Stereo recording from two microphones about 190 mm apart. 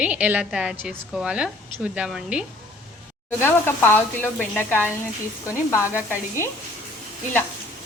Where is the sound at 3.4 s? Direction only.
10° left (ahead or behind).